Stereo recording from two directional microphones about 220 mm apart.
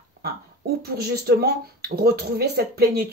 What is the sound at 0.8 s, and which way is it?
Speech, 45° right (ahead or behind).